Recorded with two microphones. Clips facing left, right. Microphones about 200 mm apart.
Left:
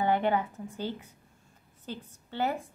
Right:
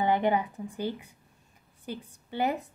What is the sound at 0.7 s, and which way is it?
A woman's voice, 15° right (ahead or behind).